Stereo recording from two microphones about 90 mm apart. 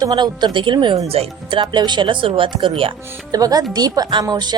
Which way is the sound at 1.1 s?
75° right (ahead or behind).